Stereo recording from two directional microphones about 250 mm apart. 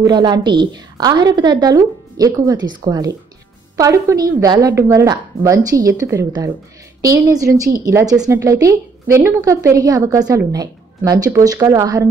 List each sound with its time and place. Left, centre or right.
0.0 s a woman's voice: centre